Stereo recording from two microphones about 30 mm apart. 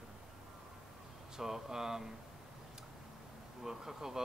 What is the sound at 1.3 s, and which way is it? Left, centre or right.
Speech, centre.